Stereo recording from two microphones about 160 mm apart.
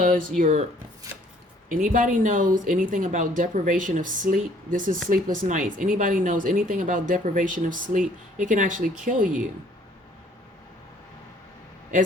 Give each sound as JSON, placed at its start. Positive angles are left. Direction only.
{"t": 0.0, "sound": "speech", "side_deg": -55}
{"t": 1.7, "sound": "speech", "side_deg": -55}